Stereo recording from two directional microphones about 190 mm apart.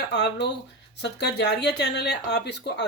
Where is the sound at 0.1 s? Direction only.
65° left (ahead or behind).